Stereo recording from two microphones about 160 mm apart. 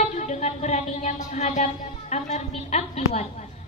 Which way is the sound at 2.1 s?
45° left (ahead or behind).